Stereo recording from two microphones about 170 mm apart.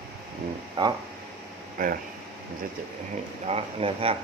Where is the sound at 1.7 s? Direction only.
55° right (ahead or behind).